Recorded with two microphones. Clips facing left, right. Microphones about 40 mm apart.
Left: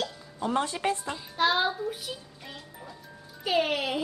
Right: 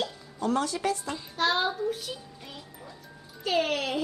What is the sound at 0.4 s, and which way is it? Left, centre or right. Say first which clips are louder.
Speech: right 1 dB; left.